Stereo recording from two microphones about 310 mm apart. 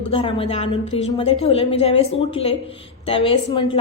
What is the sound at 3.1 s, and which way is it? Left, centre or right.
Speech, centre.